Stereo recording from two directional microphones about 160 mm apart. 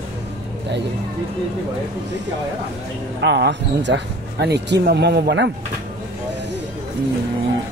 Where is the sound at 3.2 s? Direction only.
90° right.